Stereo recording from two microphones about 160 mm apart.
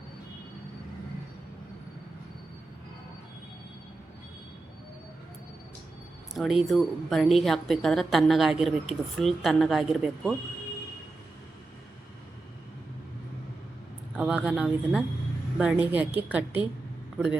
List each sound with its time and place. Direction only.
6.3 s a woman's voice: centre (ahead or behind)
14.2 s a woman's voice: 5° right (ahead or behind)